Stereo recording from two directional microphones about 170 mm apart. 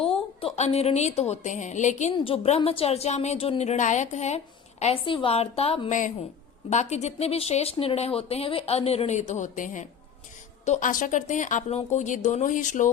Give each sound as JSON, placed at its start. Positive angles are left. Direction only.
{"t": 0.0, "sound": "a woman's voice", "side_deg": 35}